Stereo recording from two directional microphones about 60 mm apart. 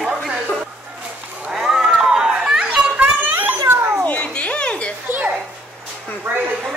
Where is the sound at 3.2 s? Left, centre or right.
Right.